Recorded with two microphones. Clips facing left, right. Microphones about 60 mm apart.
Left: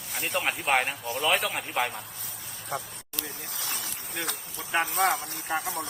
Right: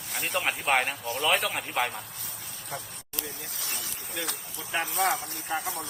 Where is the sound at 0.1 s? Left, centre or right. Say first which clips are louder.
Even; centre.